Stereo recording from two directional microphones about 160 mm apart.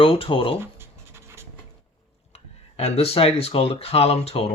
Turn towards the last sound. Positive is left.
turn(degrees=40)  # may be behind; listen again after turning